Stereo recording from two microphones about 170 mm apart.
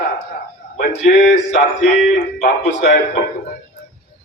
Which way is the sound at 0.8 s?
70° left (ahead or behind).